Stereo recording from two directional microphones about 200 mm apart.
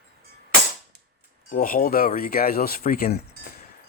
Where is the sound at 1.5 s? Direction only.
45° left (ahead or behind).